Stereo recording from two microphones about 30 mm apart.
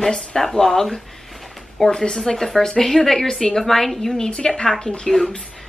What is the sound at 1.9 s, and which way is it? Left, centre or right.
Speech, left.